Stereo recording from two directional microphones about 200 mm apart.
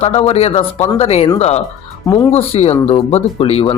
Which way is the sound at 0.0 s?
30° left (ahead or behind).